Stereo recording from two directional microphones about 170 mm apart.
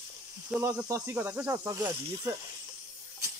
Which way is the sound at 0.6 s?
15° right (ahead or behind).